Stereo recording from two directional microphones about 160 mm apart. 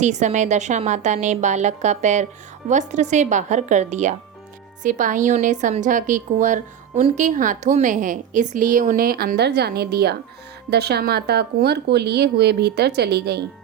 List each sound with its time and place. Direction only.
0.0 s a woman's voice: 45° right (ahead or behind); by 13.4 s 90° right